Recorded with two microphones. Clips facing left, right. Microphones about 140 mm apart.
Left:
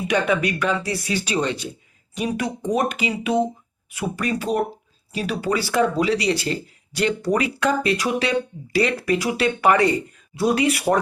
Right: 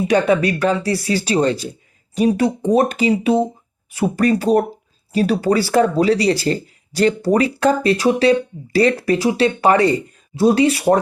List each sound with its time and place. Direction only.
0.1 s speech: 35° right (ahead or behind)